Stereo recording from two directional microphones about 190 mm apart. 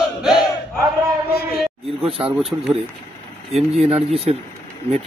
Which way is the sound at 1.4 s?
55° left (ahead or behind).